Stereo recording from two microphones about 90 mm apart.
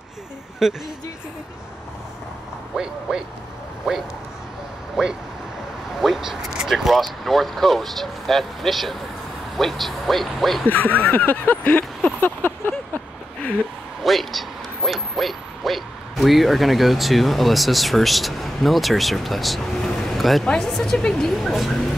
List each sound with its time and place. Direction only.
0.6 s speech: 5° right (ahead or behind)
2.7 s speech: 5° right (ahead or behind)
10.7 s speech: 20° left (ahead or behind)
14.0 s speech: centre (ahead or behind)
20.1 s a sound: centre (ahead or behind)
20.4 s speech: 5° left (ahead or behind)